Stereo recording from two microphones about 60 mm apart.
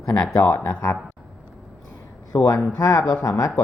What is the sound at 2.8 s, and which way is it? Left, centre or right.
Speech, left.